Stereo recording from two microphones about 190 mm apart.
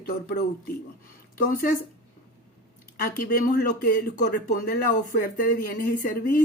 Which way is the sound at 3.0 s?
50° left (ahead or behind).